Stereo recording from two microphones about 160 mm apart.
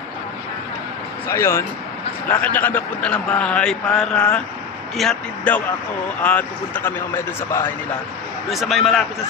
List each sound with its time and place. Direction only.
1.3 s a man's voice: 15° left (ahead or behind)
8.5 s speech: centre (ahead or behind)